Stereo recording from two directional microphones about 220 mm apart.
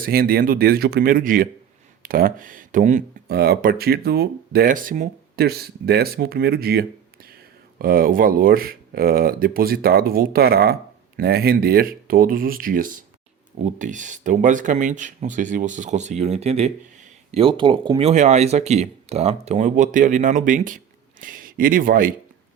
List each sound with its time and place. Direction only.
0.0 s speech: 45° right (ahead or behind)